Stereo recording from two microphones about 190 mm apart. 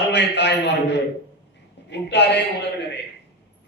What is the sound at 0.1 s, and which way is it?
A man's voice, 65° left (ahead or behind).